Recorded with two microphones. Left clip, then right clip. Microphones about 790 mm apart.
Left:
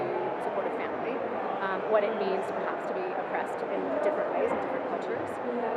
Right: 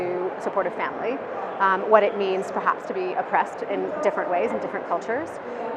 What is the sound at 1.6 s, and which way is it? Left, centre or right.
Speech, right.